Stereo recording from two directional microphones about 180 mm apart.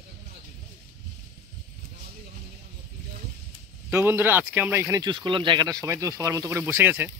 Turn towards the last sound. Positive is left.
turn(degrees=-10)  # may be behind; listen again after turning